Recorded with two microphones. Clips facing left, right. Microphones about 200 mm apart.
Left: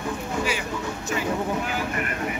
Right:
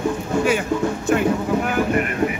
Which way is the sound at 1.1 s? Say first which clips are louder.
Right 10 dB; 60° right (ahead or behind).